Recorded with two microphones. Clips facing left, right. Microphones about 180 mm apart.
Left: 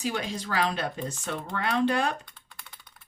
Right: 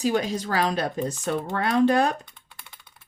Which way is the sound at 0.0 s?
40° right (ahead or behind).